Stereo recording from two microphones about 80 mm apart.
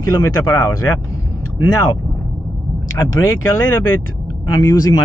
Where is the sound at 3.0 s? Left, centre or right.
Left.